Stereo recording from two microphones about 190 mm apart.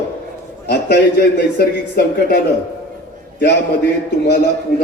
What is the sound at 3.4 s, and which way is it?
A man's voice, 65° left (ahead or behind).